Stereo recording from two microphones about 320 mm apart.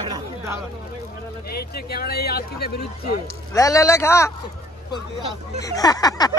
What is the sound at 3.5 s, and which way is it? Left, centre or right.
Speech, centre.